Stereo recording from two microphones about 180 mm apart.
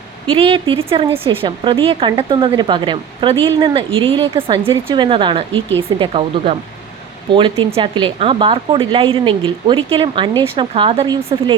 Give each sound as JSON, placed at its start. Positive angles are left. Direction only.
{"t": 0.3, "sound": "speech", "side_deg": -30}